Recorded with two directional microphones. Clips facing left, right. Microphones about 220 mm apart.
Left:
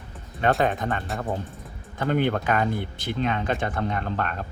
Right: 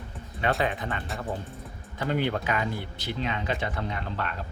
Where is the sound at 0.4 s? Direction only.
45° left (ahead or behind).